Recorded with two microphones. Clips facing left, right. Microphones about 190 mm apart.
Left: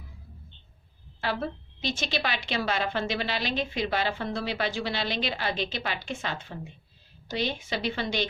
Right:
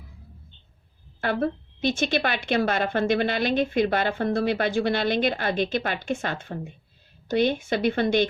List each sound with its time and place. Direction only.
1.2 s a woman's voice: 55° right (ahead or behind)